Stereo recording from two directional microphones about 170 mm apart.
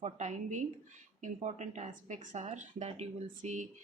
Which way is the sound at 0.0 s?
40° right (ahead or behind).